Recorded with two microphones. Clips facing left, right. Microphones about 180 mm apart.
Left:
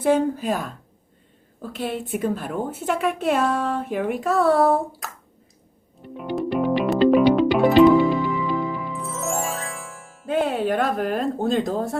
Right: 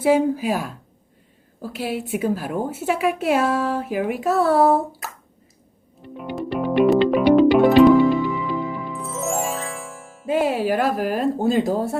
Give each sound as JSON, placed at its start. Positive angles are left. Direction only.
{"t": 0.0, "sound": "a woman's voice", "side_deg": -10}
{"t": 6.1, "sound": "music", "side_deg": 0}